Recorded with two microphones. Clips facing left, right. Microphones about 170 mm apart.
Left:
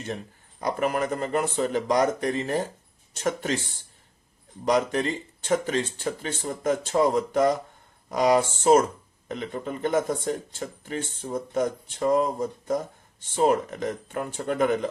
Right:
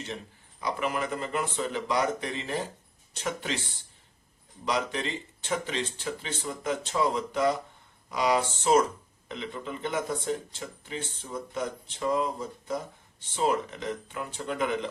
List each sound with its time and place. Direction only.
0.6 s speech: 45° left (ahead or behind)